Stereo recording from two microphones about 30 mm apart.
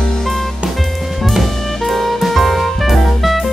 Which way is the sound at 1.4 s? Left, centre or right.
Centre.